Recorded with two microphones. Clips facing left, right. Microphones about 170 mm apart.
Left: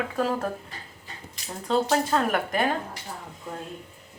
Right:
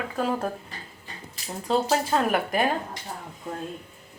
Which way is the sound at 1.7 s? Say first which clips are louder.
Even; 10° right (ahead or behind).